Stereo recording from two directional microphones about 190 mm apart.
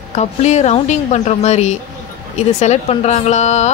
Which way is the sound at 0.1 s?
35° left (ahead or behind).